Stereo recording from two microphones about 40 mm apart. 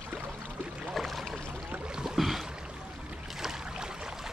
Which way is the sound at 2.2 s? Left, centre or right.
Centre.